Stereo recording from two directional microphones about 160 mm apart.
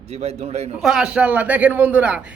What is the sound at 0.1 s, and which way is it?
Speech, 40° right (ahead or behind).